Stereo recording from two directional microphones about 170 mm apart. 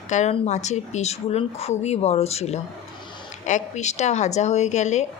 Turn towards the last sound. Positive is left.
turn(degrees=40)  # may be behind; listen again after turning